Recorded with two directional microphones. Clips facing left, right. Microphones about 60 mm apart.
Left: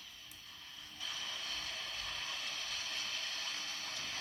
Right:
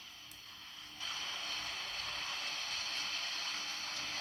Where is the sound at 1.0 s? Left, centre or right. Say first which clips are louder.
Right 1 dB; right.